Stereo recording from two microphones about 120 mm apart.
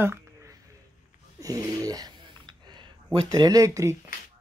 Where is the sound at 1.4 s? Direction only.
30° right (ahead or behind).